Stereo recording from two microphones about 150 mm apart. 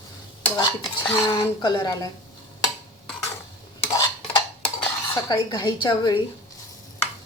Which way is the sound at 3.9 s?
25° left (ahead or behind).